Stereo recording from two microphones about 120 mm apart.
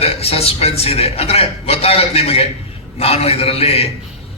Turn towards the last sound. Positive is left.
turn(degrees=55)  # may be behind; listen again after turning